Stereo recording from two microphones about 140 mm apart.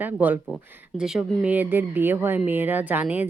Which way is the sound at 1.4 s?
15° right (ahead or behind).